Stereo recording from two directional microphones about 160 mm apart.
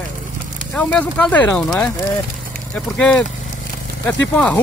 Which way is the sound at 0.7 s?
10° left (ahead or behind).